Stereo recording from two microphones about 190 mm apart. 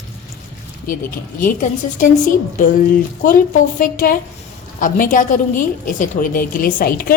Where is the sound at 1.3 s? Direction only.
45° left (ahead or behind).